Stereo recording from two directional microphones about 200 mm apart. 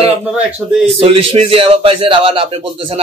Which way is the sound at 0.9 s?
25° right (ahead or behind).